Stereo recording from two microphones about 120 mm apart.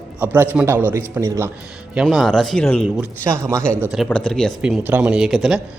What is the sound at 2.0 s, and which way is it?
Speech, 5° right (ahead or behind).